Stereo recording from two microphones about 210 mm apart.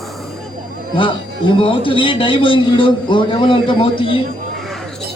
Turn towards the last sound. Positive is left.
turn(degrees=25)  # may be behind; listen again after turning